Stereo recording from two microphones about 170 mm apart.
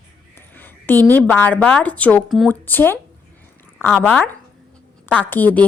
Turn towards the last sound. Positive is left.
turn(degrees=10)  # may be behind; listen again after turning